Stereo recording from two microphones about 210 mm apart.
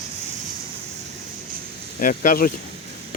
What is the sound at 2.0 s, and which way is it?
Speech, 40° left (ahead or behind).